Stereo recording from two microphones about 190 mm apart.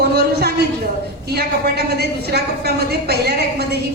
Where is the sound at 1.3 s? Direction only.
60° right (ahead or behind).